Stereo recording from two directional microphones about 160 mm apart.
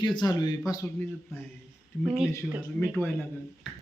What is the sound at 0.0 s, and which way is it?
Speech, 25° left (ahead or behind).